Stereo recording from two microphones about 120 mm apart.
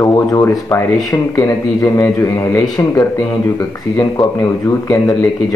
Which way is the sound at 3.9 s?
25° left (ahead or behind).